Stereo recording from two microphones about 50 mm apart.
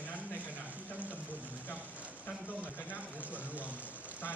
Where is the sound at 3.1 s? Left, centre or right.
Right.